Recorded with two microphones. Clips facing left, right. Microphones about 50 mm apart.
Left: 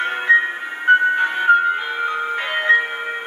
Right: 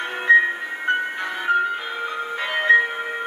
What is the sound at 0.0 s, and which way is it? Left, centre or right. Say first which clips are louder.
Music: even; left.